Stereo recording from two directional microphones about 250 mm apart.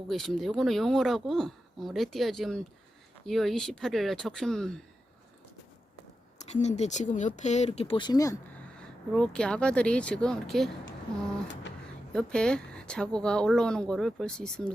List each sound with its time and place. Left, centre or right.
0.1 s speech: centre
6.5 s speech: left
8.8 s speech: centre
12.1 s speech: centre